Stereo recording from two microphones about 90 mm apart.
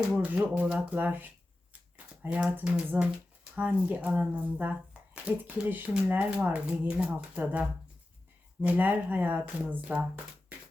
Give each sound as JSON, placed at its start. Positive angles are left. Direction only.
{"t": 0.2, "sound": "speech", "side_deg": -15}